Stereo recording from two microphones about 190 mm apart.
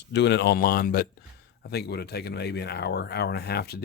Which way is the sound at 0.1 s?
65° left (ahead or behind).